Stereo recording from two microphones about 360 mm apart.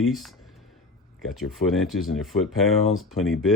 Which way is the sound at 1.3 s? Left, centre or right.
Centre.